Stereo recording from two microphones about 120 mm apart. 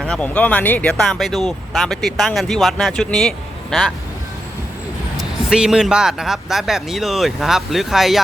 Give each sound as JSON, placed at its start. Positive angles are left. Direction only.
{"t": 0.0, "sound": "speech", "side_deg": 10}
{"t": 5.1, "sound": "speech", "side_deg": -5}